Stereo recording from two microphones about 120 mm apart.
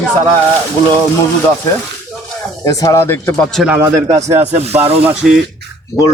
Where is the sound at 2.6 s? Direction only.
25° left (ahead or behind).